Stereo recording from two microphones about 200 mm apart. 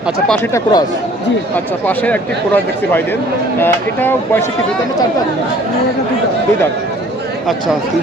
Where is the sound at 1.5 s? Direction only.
10° left (ahead or behind).